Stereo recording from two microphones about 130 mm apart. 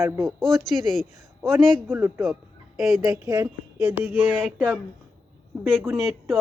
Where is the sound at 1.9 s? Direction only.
15° right (ahead or behind).